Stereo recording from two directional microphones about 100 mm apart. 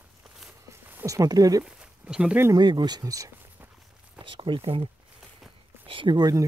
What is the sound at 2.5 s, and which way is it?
Speech, 45° right (ahead or behind).